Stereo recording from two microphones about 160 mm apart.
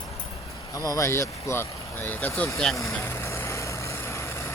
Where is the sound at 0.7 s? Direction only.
20° left (ahead or behind).